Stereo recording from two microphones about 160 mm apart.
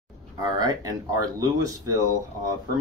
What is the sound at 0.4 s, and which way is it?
Speech, 25° right (ahead or behind).